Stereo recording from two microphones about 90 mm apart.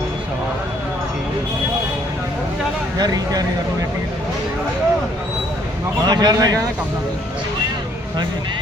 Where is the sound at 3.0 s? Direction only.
45° right (ahead or behind).